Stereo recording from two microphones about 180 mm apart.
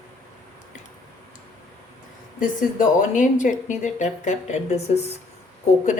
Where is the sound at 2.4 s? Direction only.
45° left (ahead or behind).